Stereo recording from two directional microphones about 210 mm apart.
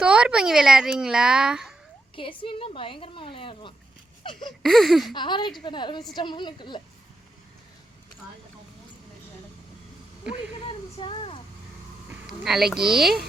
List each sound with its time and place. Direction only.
0.0 s a child's voice: 5° right (ahead or behind)
2.1 s a woman's voice: 25° left (ahead or behind)
4.2 s a sound: 25° left (ahead or behind)
4.6 s a child's voice: centre (ahead or behind)
5.1 s a woman's voice: 20° left (ahead or behind)
10.5 s a sound: 25° left (ahead or behind)
12.5 s a child's voice: centre (ahead or behind)